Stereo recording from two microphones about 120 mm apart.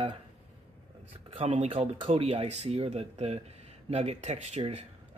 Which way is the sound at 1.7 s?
50° right (ahead or behind).